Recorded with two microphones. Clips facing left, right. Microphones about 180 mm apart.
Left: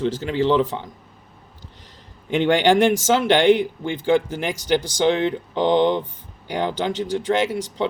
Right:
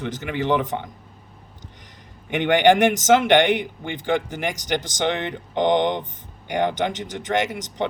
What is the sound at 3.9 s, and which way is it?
Speech, 20° right (ahead or behind).